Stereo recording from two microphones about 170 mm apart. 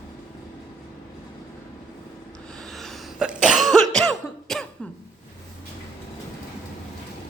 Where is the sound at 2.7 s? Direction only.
Centre (ahead or behind).